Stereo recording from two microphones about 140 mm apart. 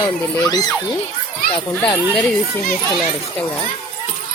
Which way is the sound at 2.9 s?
10° left (ahead or behind).